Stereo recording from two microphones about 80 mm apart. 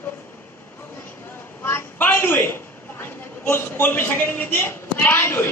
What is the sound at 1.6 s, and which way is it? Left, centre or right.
A woman's voice, left.